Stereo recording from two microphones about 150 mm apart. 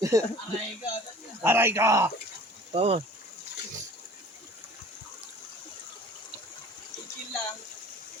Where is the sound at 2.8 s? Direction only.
45° right (ahead or behind).